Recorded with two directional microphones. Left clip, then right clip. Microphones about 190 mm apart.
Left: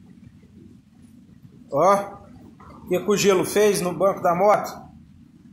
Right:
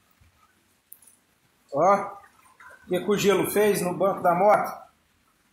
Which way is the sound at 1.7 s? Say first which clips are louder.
Left 3 dB; 15° left (ahead or behind).